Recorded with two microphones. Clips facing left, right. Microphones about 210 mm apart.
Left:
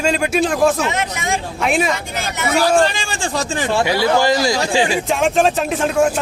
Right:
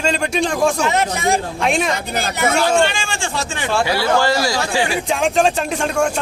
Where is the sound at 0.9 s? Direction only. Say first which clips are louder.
Right 4 dB; 35° right (ahead or behind).